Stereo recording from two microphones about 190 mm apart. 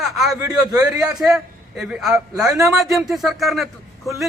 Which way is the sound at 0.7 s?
20° right (ahead or behind).